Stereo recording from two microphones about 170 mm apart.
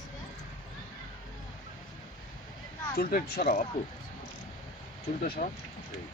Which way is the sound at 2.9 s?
60° left (ahead or behind).